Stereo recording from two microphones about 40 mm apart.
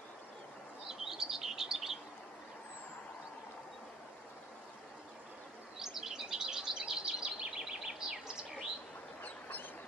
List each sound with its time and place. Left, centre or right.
0.8 s chirp: centre
5.8 s bird: centre
6.9 s bird vocalization: centre
9.2 s a sound: left